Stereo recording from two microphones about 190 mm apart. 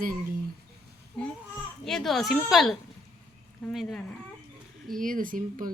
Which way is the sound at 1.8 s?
Centre (ahead or behind).